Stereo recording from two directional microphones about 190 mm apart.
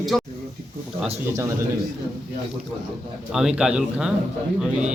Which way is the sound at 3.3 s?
5° right (ahead or behind).